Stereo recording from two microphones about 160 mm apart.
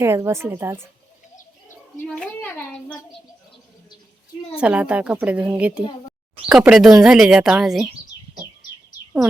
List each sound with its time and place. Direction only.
0.0 s speech: 15° right (ahead or behind)
2.0 s a child's voice: 5° left (ahead or behind)
4.5 s speech: 5° right (ahead or behind)